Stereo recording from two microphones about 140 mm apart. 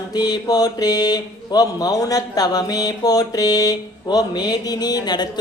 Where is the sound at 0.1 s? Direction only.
30° left (ahead or behind).